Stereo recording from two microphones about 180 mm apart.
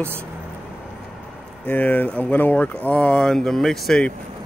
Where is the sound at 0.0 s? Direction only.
10° right (ahead or behind).